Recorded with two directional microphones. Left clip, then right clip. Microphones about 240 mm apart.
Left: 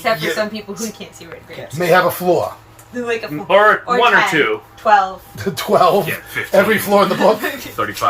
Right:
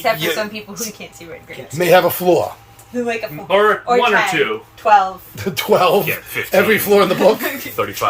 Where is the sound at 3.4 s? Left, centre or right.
Left.